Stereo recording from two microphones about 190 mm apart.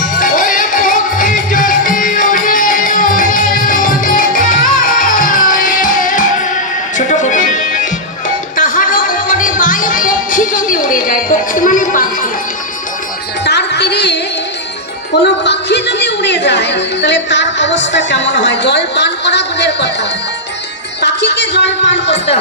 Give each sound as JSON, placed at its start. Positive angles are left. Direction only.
{"t": 0.2, "sound": "music", "side_deg": 45}
{"t": 13.4, "sound": "music", "side_deg": 65}
{"t": 15.2, "sound": "a sound", "side_deg": 65}